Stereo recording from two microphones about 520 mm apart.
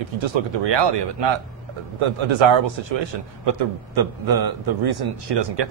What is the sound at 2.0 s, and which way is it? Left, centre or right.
A man's voice, right.